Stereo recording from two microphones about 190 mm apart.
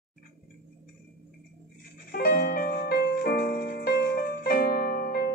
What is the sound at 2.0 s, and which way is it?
Music, 50° left (ahead or behind).